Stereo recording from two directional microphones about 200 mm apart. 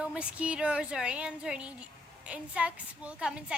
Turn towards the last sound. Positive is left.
turn(degrees=-5)  # may be behind; listen again after turning